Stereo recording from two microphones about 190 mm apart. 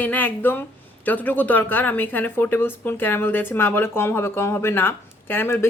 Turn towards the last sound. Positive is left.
turn(degrees=10)  # may be behind; listen again after turning